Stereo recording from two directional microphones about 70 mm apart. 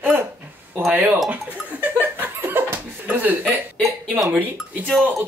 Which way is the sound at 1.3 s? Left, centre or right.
Right.